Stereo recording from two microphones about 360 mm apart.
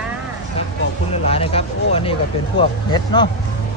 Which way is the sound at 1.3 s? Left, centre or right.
Centre.